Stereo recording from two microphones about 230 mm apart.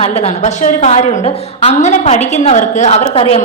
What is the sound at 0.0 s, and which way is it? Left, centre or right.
A woman's voice, left.